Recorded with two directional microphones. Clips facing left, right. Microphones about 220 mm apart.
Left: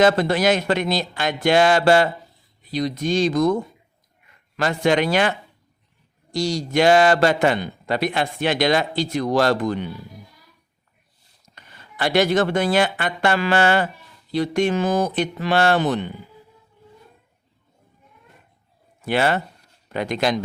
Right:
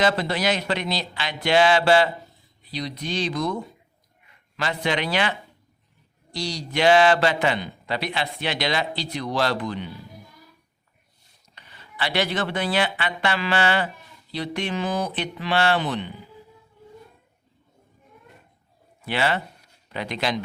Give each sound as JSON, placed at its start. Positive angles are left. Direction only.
{"t": 0.0, "sound": "speech", "side_deg": 50}
{"t": 11.4, "sound": "speech", "side_deg": 45}
{"t": 19.0, "sound": "speech", "side_deg": 45}